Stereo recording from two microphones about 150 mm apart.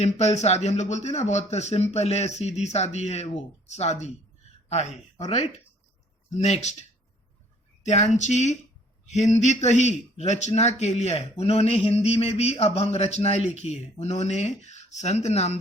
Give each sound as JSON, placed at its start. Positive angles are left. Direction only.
{"t": 0.0, "sound": "a man's voice", "side_deg": 50}
{"t": 7.9, "sound": "a man's voice", "side_deg": 50}